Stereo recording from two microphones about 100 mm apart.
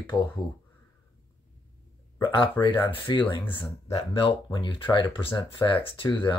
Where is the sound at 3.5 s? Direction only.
65° left (ahead or behind).